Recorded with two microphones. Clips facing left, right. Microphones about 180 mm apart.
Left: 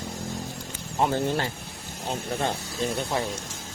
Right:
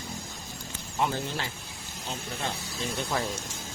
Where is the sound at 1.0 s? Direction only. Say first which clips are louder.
Left 6 dB; 50° left (ahead or behind).